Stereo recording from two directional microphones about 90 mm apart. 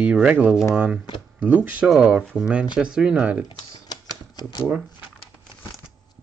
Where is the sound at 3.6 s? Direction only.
50° left (ahead or behind).